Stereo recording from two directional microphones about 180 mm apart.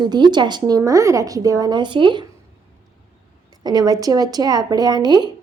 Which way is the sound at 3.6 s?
20° right (ahead or behind).